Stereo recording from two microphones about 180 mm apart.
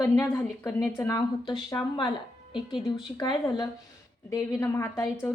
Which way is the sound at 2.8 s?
25° left (ahead or behind).